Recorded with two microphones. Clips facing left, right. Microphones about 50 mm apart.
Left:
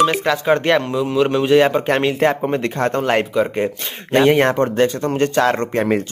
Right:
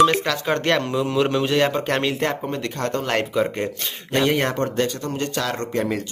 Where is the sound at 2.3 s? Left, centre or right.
Left.